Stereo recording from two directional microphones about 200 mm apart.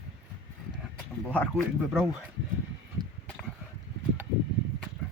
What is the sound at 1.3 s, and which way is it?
Speech, 5° left (ahead or behind).